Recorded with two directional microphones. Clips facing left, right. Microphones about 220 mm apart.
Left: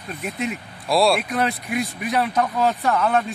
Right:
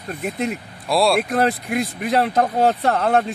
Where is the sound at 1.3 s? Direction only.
45° right (ahead or behind).